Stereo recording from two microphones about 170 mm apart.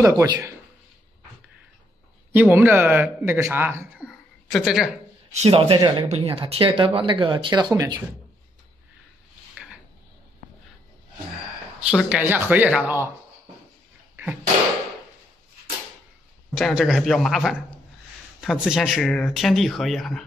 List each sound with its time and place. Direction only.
0.0 s a man's voice: 20° right (ahead or behind)
2.3 s a man's voice: 10° right (ahead or behind)
4.1 s a sound: centre (ahead or behind)
5.3 s a man's voice: 35° right (ahead or behind)
11.9 s a man's voice: 5° right (ahead or behind)
14.1 s a sound: 10° right (ahead or behind)
16.5 s speech: centre (ahead or behind)